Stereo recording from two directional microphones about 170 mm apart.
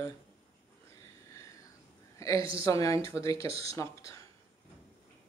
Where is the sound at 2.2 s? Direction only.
20° left (ahead or behind).